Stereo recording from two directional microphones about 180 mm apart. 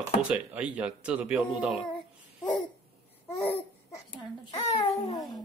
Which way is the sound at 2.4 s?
10° left (ahead or behind).